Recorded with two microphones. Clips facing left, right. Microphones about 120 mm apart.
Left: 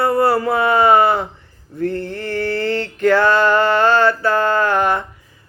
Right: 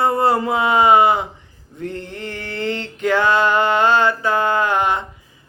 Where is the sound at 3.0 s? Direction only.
15° right (ahead or behind).